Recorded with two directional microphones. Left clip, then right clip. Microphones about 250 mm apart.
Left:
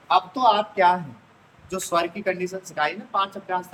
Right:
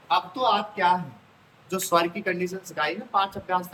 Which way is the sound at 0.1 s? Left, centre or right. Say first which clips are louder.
Left 4 dB; centre.